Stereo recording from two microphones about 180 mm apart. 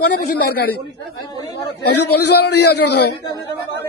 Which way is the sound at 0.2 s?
60° left (ahead or behind).